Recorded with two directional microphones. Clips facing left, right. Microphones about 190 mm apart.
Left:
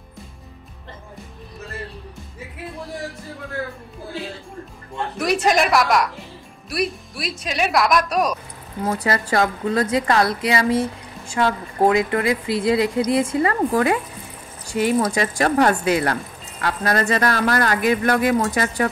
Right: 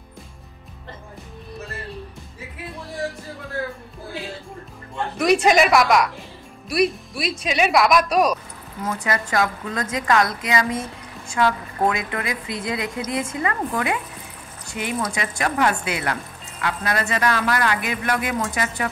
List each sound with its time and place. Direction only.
5.2 s speech: centre (ahead or behind)
8.8 s a woman's voice: 35° left (ahead or behind)